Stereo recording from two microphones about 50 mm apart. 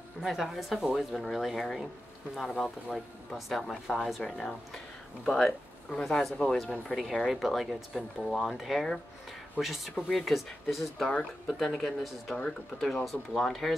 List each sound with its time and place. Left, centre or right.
0.2 s speech: centre
3.3 s speech: centre
5.2 s speech: centre
6.9 s speech: centre